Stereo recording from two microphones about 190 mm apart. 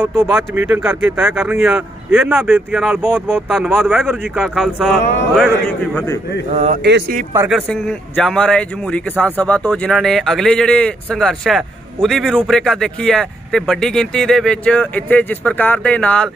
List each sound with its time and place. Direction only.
0.0 s speech: 10° right (ahead or behind)
6.5 s speech: 35° right (ahead or behind)
6.8 s speech: 60° right (ahead or behind)
7.3 s speech: 5° right (ahead or behind)